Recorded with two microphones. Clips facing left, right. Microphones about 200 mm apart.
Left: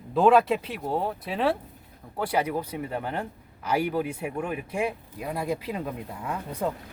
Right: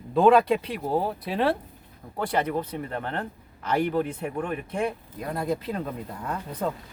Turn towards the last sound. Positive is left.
turn(degrees=10)  # may be behind; listen again after turning